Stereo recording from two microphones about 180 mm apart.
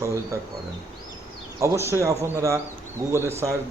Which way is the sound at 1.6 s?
15° right (ahead or behind).